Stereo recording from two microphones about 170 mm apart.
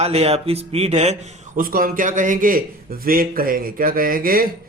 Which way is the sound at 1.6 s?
55° right (ahead or behind).